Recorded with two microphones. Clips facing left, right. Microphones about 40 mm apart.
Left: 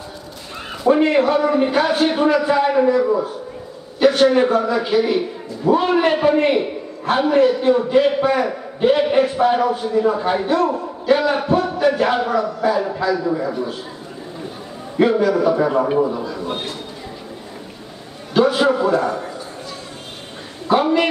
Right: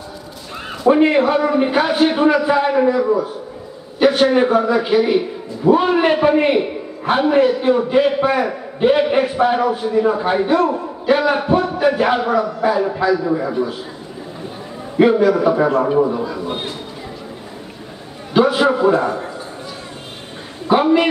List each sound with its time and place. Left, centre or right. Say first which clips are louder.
0.8 s a man's voice: right 2 dB; centre
15.0 s a man's voice: right 3 dB; centre
18.3 s a man's voice: right 1 dB; centre
20.6 s a woman's voice: right 2 dB; centre